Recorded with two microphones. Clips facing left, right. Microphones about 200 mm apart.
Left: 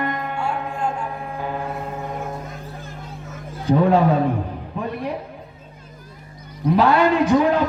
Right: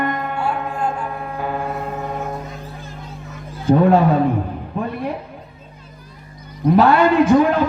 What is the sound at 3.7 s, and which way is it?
Speech, 50° right (ahead or behind).